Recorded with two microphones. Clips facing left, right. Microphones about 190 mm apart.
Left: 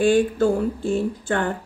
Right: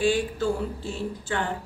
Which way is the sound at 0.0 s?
50° left (ahead or behind).